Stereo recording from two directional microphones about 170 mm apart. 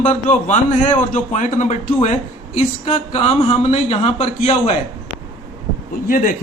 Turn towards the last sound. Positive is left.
turn(degrees=50)  # may be behind; listen again after turning